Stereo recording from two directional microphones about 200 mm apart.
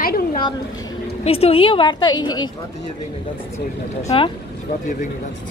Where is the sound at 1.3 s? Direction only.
30° left (ahead or behind).